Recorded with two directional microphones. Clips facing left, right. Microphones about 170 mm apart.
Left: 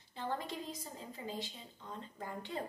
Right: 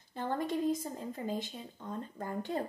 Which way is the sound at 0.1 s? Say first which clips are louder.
Right 6 dB; 50° right (ahead or behind).